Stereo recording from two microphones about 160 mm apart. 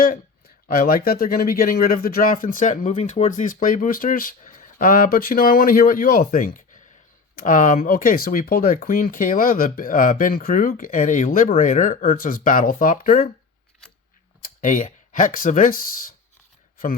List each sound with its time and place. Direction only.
0.0 s speech: 65° left (ahead or behind)
14.6 s speech: 50° left (ahead or behind)